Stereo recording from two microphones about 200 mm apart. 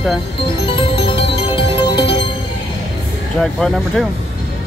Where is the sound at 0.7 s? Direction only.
25° left (ahead or behind).